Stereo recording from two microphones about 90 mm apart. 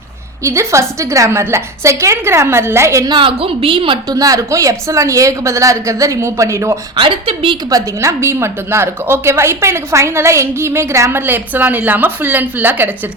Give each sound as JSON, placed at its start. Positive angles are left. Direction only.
{"t": 0.4, "sound": "a woman's voice", "side_deg": -35}
{"t": 3.1, "sound": "a woman's voice", "side_deg": -70}
{"t": 4.1, "sound": "a woman's voice", "side_deg": -40}
{"t": 6.9, "sound": "a woman's voice", "side_deg": -70}
{"t": 7.7, "sound": "a woman's voice", "side_deg": -40}